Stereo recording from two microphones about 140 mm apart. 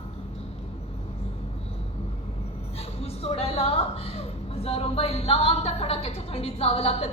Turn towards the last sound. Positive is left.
turn(degrees=45)  # may be behind; listen again after turning